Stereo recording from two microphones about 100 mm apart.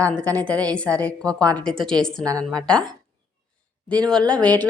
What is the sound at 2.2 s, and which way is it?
Speech, 35° right (ahead or behind).